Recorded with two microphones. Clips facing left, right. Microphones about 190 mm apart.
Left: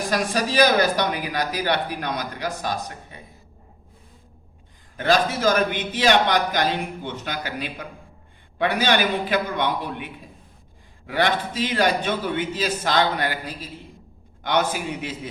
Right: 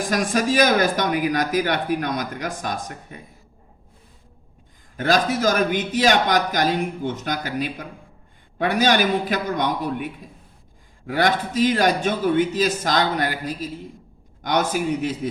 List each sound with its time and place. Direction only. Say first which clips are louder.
0.1 s speech: right 3 dB; 50° right (ahead or behind)
4.9 s speech: right 1 dB; 45° right (ahead or behind)